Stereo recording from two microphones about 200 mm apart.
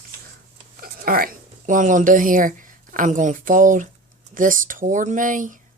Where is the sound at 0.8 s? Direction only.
45° right (ahead or behind).